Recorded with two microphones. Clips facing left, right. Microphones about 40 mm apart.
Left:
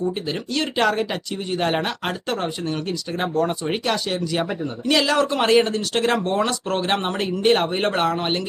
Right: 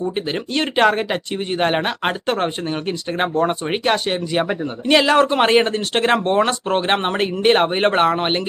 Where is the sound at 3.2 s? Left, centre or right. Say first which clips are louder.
Right 3 dB; right.